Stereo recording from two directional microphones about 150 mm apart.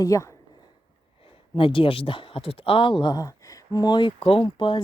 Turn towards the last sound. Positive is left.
turn(degrees=35)  # may be behind; listen again after turning